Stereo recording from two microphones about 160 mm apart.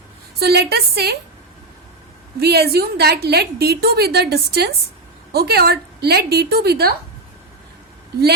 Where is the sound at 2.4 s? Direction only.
80° right.